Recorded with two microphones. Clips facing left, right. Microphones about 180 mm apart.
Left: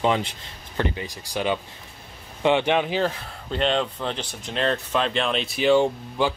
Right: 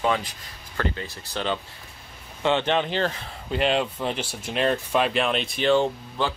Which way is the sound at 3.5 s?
5° right (ahead or behind).